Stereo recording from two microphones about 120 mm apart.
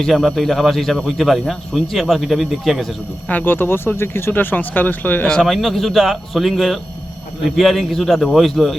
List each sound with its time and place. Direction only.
0.0 s speech: centre (ahead or behind)
3.2 s speech: 15° left (ahead or behind)
5.4 s speech: centre (ahead or behind)